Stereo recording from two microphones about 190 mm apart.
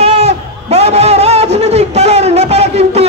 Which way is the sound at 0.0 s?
35° right (ahead or behind).